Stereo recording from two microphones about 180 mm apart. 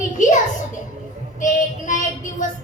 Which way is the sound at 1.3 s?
45° left (ahead or behind).